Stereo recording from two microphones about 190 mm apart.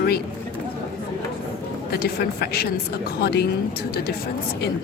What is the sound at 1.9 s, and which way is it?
A woman's voice, 55° left (ahead or behind).